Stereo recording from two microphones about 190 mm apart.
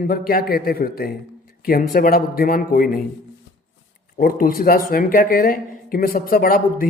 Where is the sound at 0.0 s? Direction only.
50° left (ahead or behind).